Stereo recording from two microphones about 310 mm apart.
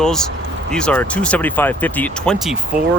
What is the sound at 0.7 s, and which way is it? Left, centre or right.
Speech, centre.